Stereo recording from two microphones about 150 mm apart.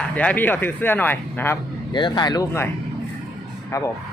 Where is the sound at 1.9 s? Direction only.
30° left (ahead or behind).